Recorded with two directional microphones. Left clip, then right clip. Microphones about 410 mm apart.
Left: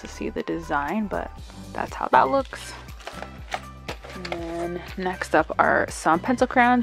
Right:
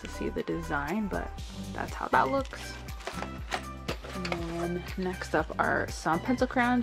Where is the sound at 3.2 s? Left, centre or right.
Centre.